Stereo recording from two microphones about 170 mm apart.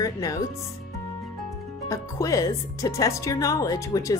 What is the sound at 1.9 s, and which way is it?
Speech, 20° left (ahead or behind).